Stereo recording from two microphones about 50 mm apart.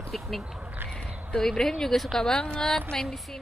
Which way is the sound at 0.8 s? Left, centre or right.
Right.